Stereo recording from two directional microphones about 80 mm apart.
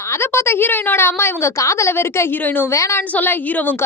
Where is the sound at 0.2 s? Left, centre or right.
Left.